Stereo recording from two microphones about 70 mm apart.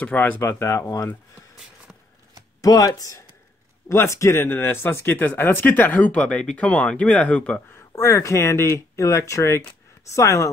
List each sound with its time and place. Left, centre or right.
0.0 s speech: left
0.4 s speech: left
2.6 s speech: left
3.9 s speech: left
5.2 s speech: left
8.0 s speech: left